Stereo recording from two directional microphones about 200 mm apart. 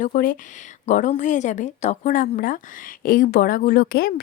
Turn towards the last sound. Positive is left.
turn(degrees=50)  # may be behind; listen again after turning